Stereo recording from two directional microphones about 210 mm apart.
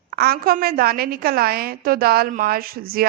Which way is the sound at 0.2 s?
45° right (ahead or behind).